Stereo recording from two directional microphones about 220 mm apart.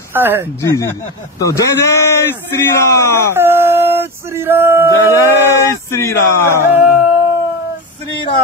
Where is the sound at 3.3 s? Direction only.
10° right (ahead or behind).